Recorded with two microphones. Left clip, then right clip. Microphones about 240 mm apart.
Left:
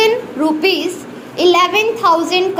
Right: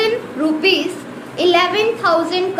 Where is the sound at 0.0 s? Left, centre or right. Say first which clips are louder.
Left 4 dB; centre.